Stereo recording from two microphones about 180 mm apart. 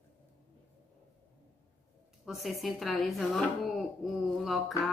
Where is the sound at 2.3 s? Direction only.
Centre (ahead or behind).